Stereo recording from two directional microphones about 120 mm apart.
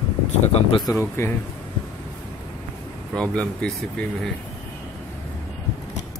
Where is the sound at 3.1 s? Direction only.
5° left (ahead or behind).